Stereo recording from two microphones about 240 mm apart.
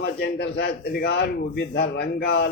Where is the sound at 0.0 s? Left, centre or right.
Left.